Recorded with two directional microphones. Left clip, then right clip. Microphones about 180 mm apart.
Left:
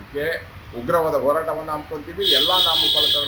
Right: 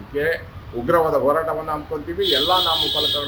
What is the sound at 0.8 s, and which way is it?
Speech, 15° right (ahead or behind).